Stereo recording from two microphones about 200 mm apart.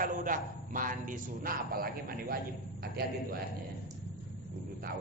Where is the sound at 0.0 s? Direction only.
45° right (ahead or behind).